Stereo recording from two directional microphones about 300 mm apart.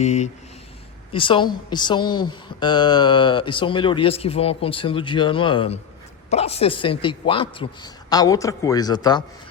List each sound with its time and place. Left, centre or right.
0.0 s a woman's voice: left